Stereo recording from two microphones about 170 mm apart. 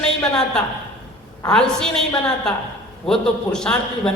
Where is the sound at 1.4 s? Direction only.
5° left (ahead or behind).